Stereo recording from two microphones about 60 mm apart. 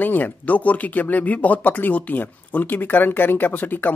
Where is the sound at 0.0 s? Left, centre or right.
Left.